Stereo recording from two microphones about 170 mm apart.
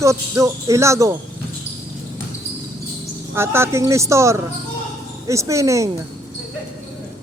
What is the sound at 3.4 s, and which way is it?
Speech, 15° right (ahead or behind).